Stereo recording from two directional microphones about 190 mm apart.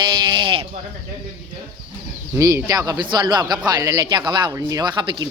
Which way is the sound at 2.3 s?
15° right (ahead or behind).